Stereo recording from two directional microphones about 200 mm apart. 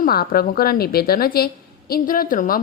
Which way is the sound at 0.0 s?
45° left (ahead or behind).